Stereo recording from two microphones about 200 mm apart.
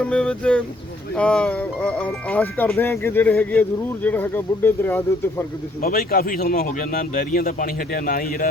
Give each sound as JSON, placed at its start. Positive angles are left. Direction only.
{"t": 0.0, "sound": "speech", "side_deg": 5}
{"t": 5.8, "sound": "speech", "side_deg": 45}